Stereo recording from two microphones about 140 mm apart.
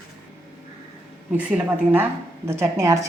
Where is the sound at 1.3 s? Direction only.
10° right (ahead or behind).